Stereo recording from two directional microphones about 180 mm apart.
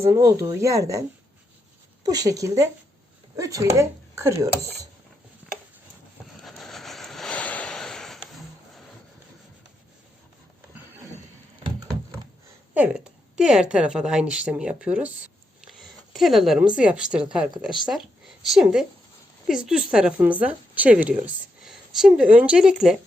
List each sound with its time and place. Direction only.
0.0 s speech: 15° right (ahead or behind)
2.0 s speech: 20° right (ahead or behind)
6.4 s a sound: centre (ahead or behind)
12.7 s a woman's voice: 5° right (ahead or behind)